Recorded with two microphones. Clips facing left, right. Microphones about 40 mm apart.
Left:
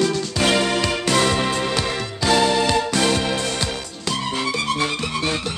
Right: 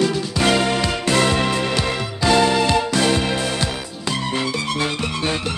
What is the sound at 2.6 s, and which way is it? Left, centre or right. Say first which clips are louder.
Music: right 1 dB; centre.